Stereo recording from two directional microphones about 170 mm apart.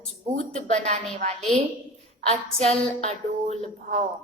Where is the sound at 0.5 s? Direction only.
40° right (ahead or behind).